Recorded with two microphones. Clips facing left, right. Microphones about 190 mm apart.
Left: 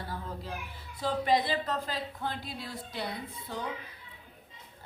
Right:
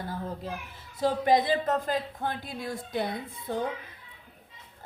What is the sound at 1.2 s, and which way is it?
A woman's voice, 45° right (ahead or behind).